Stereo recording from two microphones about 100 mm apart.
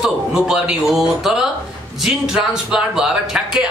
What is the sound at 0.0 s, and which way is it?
Speech, 10° right (ahead or behind).